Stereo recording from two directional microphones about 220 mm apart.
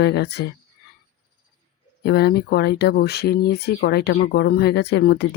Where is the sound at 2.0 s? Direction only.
45° left (ahead or behind).